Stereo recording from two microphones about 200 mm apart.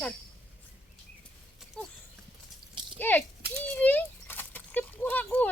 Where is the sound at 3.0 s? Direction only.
10° left (ahead or behind).